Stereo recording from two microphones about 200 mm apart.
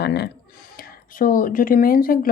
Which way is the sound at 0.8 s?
45° left (ahead or behind).